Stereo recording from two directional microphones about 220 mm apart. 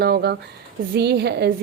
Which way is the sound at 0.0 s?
45° right (ahead or behind).